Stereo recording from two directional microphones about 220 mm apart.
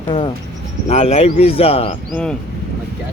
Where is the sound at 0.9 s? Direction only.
30° left (ahead or behind).